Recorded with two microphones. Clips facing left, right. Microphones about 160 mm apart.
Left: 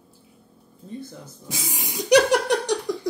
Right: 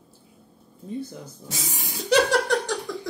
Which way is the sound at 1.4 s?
15° left (ahead or behind).